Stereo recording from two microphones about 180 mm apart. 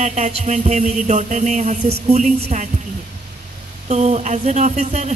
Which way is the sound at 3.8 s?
35° right (ahead or behind).